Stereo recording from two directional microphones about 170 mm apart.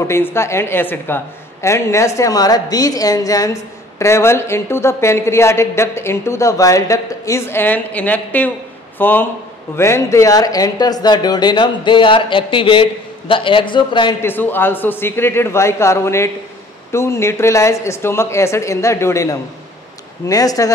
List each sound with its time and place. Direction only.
0.1 s a woman's voice: 15° left (ahead or behind)
14.2 s a woman's voice: 10° left (ahead or behind)